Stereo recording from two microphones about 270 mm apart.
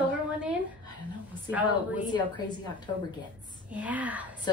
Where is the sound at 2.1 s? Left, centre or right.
Centre.